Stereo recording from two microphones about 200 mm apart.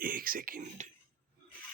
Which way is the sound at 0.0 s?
45° right (ahead or behind).